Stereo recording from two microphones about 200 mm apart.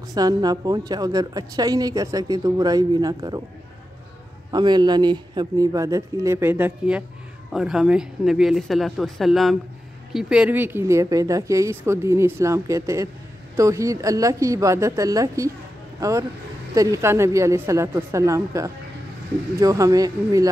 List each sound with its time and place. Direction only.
0.1 s a woman's voice: 20° right (ahead or behind)
4.5 s a woman's voice: 20° right (ahead or behind)